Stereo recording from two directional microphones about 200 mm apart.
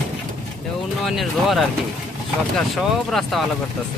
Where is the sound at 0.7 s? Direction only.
Centre (ahead or behind).